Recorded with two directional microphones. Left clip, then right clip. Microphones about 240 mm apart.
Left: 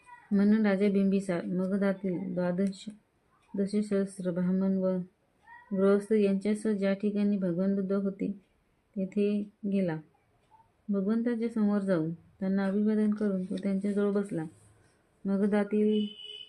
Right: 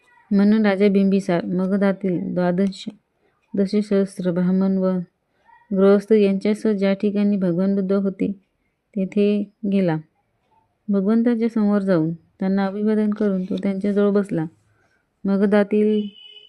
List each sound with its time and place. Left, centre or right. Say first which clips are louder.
0.3 s a woman's voice: right 9 dB; right